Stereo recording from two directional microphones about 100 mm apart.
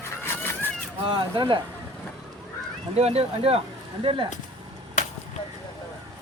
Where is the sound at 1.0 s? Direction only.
55° right (ahead or behind).